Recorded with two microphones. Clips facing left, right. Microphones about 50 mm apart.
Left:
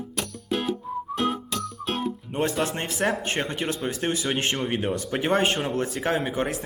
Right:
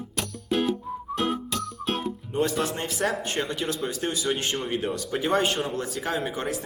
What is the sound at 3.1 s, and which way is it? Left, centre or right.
Speech, left.